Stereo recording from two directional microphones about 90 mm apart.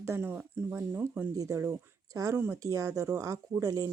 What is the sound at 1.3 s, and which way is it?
Speech, 40° right (ahead or behind).